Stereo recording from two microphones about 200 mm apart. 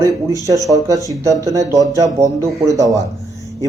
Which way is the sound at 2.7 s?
15° right (ahead or behind).